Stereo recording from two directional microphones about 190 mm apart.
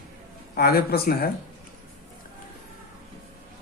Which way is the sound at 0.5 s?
55° left (ahead or behind).